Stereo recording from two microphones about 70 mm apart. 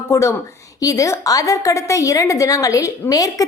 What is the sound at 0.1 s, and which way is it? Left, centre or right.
A woman's voice, left.